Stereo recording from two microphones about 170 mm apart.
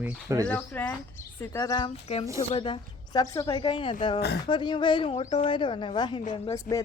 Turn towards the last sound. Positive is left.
turn(degrees=20)  # may be behind; listen again after turning